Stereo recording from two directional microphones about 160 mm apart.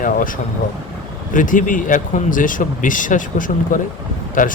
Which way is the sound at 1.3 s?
55° left (ahead or behind).